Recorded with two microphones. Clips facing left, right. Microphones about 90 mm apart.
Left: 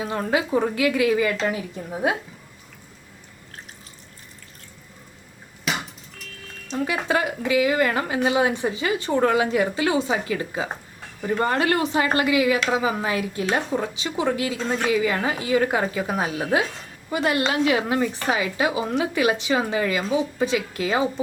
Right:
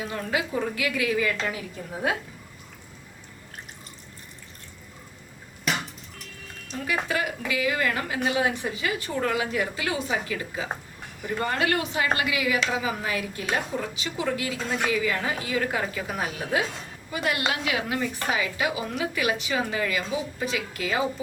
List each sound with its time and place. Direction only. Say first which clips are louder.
0.0 s a woman's voice: left 5 dB; 30° left (ahead or behind)
5.7 s a sound: left 1 dB; centre (ahead or behind)
6.9 s a woman's voice: left 2 dB; 30° left (ahead or behind)
16.3 s a woman's voice: left 4 dB; 25° left (ahead or behind)